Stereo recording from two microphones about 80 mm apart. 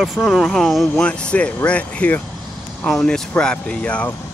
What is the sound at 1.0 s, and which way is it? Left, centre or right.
Speech, centre.